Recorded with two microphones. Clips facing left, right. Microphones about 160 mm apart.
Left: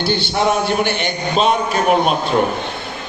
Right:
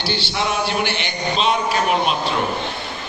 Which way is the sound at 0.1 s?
50° left (ahead or behind).